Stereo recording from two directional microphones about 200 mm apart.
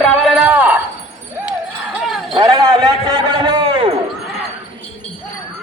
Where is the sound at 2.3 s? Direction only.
20° right (ahead or behind).